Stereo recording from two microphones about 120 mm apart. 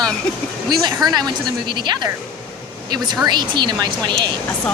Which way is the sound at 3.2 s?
35° right (ahead or behind).